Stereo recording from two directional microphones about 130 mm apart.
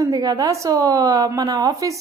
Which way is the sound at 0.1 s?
30° right (ahead or behind).